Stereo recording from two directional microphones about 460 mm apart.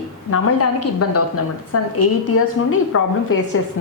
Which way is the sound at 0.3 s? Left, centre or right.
Left.